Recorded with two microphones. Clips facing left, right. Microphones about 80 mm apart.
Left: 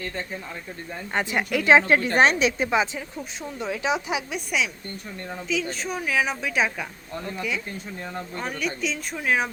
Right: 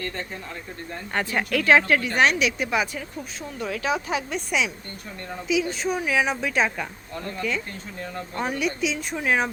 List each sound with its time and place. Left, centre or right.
1.1 s a woman's voice: centre
4.3 s a woman's voice: centre
5.5 s a woman's voice: centre
8.4 s a woman's voice: centre